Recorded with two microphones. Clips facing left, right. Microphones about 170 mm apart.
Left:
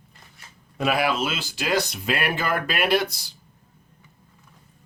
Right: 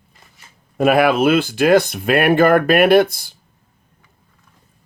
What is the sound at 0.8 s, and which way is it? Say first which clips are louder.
Speech: right 9 dB; 55° right (ahead or behind).